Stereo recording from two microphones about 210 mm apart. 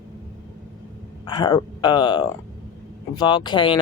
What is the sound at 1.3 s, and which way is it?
Speech, 20° left (ahead or behind).